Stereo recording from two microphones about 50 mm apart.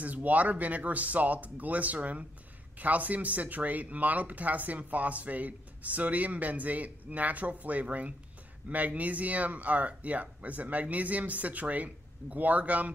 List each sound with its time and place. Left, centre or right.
0.0 s speech: right